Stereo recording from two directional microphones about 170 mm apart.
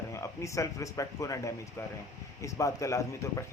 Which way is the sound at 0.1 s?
15° left (ahead or behind).